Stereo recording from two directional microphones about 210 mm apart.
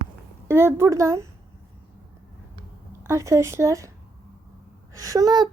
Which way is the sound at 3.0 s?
15° right (ahead or behind).